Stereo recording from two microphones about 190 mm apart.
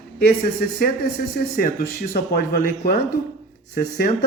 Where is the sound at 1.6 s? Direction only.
50° left (ahead or behind).